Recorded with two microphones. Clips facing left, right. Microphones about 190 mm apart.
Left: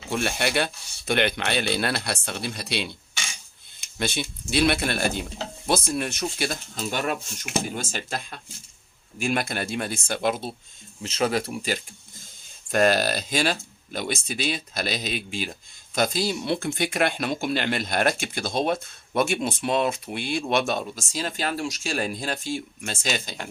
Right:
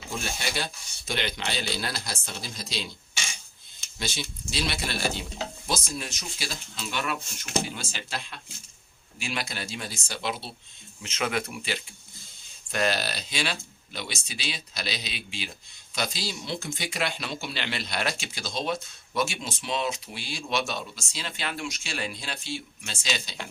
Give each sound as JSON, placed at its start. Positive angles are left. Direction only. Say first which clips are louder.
{"t": 0.1, "sound": "speech", "louder": "left 8 dB", "side_deg": 65}
{"t": 3.9, "sound": "speech", "louder": "left 6 dB", "side_deg": 60}
{"t": 11.0, "sound": "speech", "louder": "left 5 dB", "side_deg": 35}
{"t": 11.7, "sound": "a sound", "louder": "left 5 dB", "side_deg": 45}
{"t": 12.7, "sound": "speech", "louder": "left 7 dB", "side_deg": 50}